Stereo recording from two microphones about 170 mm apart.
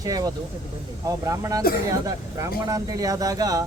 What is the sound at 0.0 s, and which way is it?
Speech, 20° right (ahead or behind).